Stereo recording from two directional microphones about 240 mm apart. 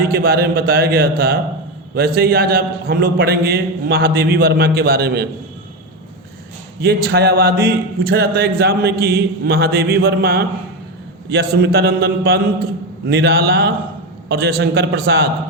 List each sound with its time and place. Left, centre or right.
0.0 s speech: right
6.8 s a man's voice: right